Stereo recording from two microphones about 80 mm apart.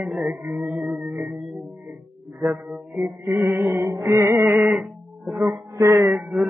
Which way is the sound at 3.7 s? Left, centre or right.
Right.